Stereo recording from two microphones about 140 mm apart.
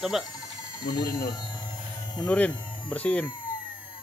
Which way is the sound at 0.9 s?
30° left (ahead or behind).